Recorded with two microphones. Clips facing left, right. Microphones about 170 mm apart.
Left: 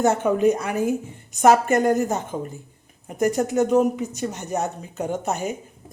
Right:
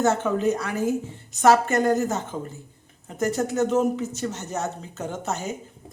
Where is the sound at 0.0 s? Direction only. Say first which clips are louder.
Left 3 dB; 15° left (ahead or behind).